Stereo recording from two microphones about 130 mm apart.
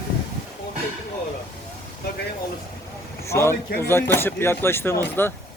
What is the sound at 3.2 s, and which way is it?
Speech, 20° left (ahead or behind).